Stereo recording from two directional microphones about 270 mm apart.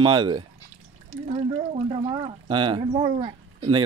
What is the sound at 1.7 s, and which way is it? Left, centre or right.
Speech, centre.